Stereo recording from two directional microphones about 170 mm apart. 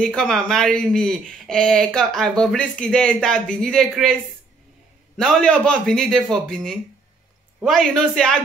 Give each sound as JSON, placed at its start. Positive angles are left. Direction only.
{"t": 0.0, "sound": "speech", "side_deg": 5}